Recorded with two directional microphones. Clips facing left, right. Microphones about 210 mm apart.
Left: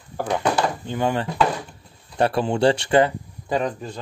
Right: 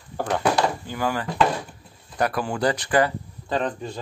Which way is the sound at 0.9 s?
25° left (ahead or behind).